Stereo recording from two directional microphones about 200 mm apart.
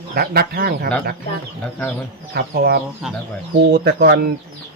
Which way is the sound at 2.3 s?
50° right (ahead or behind).